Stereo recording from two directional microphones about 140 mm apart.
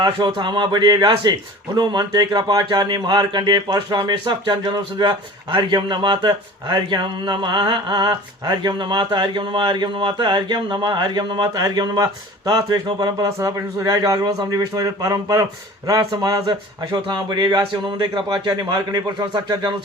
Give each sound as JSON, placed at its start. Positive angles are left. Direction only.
{"t": 0.0, "sound": "a man's voice", "side_deg": -30}